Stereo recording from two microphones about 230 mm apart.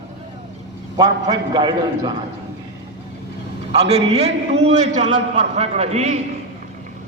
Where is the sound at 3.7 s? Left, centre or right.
Right.